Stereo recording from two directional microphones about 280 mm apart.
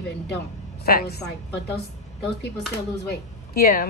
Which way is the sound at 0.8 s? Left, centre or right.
Left.